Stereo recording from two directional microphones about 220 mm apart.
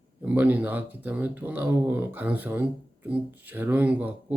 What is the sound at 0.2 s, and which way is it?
Speech, 5° right (ahead or behind).